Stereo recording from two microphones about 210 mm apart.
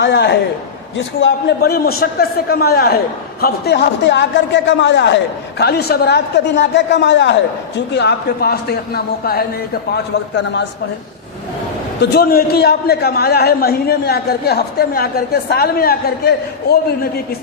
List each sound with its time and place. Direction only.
0.0 s a man's voice: 55° left (ahead or behind)
12.1 s a man's voice: 45° left (ahead or behind)